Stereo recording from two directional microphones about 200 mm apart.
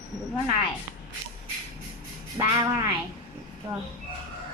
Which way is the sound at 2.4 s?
15° right (ahead or behind).